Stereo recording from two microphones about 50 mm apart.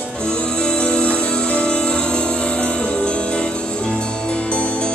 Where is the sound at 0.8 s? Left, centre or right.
Centre.